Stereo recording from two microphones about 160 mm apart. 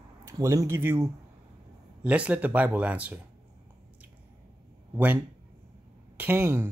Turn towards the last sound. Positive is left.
turn(degrees=-15)  # may be behind; listen again after turning